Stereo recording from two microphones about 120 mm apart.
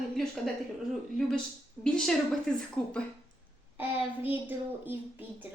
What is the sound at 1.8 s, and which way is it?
Speech, 5° left (ahead or behind).